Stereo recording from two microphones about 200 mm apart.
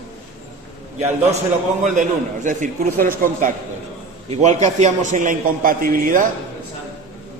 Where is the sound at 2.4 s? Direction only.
40° right (ahead or behind).